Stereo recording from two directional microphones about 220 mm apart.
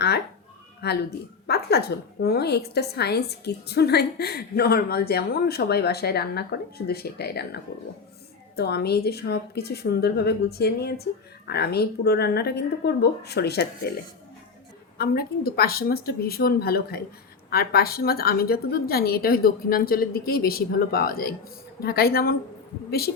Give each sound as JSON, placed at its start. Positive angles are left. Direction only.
{"t": 0.8, "sound": "a woman's voice", "side_deg": 50}
{"t": 14.9, "sound": "a woman's voice", "side_deg": 45}